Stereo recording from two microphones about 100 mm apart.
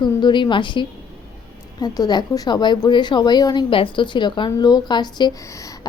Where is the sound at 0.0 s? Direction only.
50° left (ahead or behind).